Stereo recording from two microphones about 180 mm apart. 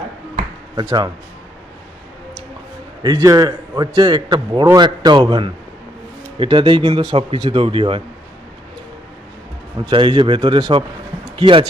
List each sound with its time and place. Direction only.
0.8 s a man's voice: 20° right (ahead or behind)
3.0 s a man's voice: 20° right (ahead or behind)
9.9 s a man's voice: 25° right (ahead or behind)